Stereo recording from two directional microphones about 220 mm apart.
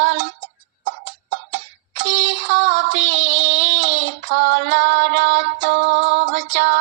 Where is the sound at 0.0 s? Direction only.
55° right (ahead or behind).